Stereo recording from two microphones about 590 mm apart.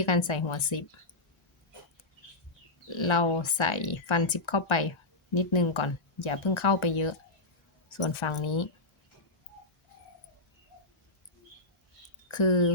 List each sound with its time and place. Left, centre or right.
0.0 s speech: left
2.9 s speech: left
12.3 s speech: left